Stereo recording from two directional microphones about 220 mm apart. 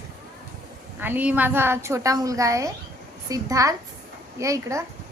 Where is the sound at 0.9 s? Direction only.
10° right (ahead or behind).